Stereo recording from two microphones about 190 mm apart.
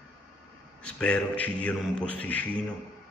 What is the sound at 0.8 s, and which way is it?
A man's voice, 5° left (ahead or behind).